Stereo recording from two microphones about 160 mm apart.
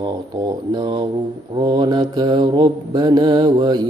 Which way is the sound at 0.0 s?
25° right (ahead or behind).